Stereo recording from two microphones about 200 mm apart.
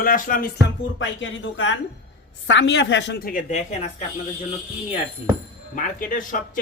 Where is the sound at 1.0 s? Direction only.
70° left (ahead or behind); by 3.7 s 40° left (ahead or behind).